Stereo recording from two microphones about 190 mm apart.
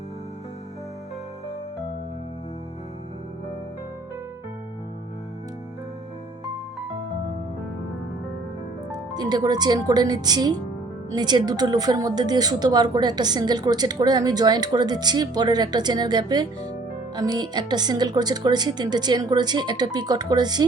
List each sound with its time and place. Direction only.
8.9 s a woman's voice: 20° right (ahead or behind)